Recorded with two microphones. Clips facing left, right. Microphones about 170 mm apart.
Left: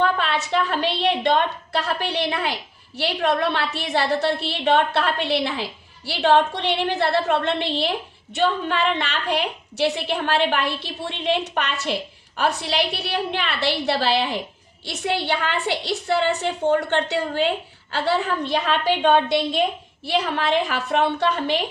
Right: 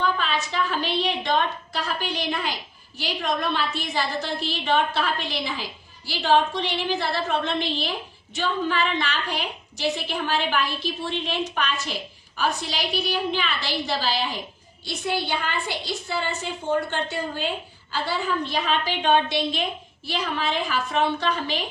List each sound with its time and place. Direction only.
0.0 s a woman's voice: 70° left (ahead or behind)
20.1 s a woman's voice: 70° left (ahead or behind)